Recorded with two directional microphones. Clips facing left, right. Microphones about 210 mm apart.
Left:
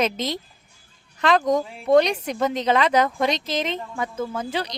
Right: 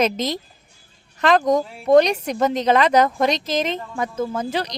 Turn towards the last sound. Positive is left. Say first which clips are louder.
# right 3 dB
turn(degrees=-40)  # may be behind; listen again after turning